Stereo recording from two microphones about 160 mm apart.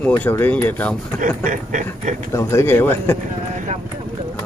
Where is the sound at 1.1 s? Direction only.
55° right (ahead or behind).